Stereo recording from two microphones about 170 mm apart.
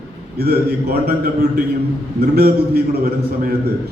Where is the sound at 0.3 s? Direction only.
65° right (ahead or behind).